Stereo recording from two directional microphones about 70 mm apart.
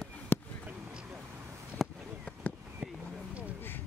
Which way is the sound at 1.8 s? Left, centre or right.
Centre.